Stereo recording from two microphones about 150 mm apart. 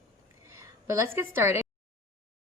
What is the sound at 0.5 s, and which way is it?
A woman's voice, 20° right (ahead or behind).